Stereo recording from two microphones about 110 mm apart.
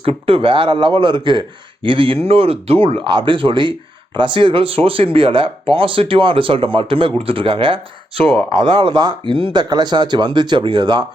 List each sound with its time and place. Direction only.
0.0 s speech: 60° right (ahead or behind)